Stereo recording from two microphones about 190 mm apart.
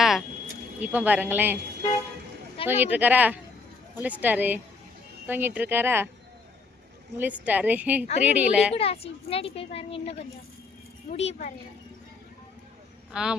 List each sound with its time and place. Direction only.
0.0 s a sound: centre (ahead or behind)
0.8 s speech: 10° right (ahead or behind)
2.6 s speech: 10° right (ahead or behind)
7.2 s speech: 10° right (ahead or behind)
8.7 s a woman's voice: 30° left (ahead or behind)
13.1 s speech: 5° right (ahead or behind)